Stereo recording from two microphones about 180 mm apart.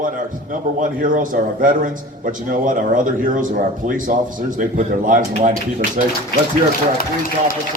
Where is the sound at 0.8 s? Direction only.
50° right (ahead or behind).